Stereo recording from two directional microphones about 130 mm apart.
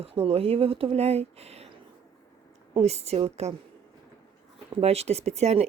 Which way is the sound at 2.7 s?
55° right (ahead or behind).